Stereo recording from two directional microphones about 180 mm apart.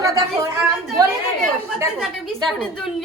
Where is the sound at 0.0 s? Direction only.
15° right (ahead or behind).